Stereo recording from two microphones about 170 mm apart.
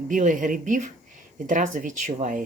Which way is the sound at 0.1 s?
50° right (ahead or behind).